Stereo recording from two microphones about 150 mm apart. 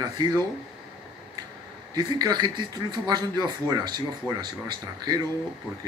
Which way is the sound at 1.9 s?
25° right (ahead or behind).